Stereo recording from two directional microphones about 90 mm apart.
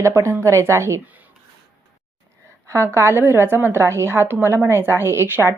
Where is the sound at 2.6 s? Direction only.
30° right (ahead or behind).